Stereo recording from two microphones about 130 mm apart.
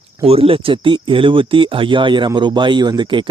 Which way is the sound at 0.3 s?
45° right (ahead or behind).